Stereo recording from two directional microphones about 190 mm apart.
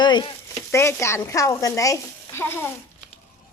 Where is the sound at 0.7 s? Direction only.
15° left (ahead or behind).